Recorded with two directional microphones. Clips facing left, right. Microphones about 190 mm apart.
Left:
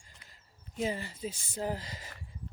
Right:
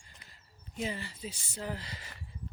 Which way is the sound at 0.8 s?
40° left (ahead or behind).